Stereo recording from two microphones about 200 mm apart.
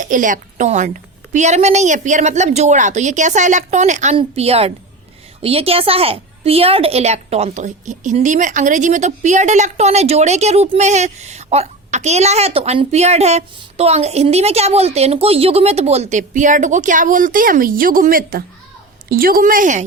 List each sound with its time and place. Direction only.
0.0 s a woman's voice: 40° right (ahead or behind)